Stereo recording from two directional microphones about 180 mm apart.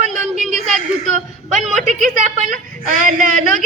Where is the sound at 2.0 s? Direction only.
45° right (ahead or behind).